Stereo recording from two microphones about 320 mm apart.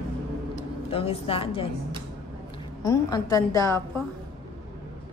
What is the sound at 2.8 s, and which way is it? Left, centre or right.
Speech, centre.